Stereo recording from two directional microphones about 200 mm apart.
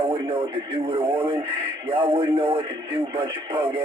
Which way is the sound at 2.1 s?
25° right (ahead or behind).